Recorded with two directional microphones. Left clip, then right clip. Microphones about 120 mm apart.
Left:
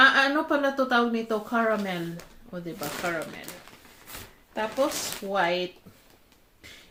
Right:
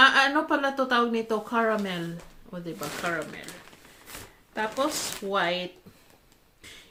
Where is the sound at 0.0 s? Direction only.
25° right (ahead or behind).